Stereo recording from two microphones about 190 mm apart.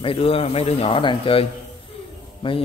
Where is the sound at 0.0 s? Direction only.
30° left (ahead or behind).